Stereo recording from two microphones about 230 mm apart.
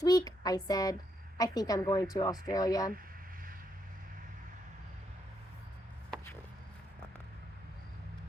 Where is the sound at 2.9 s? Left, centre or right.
Right.